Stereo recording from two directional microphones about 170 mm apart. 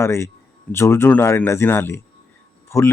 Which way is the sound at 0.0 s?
15° left (ahead or behind).